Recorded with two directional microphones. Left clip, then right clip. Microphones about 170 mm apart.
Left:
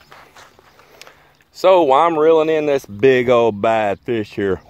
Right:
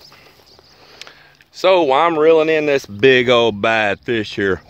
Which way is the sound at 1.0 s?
15° left (ahead or behind).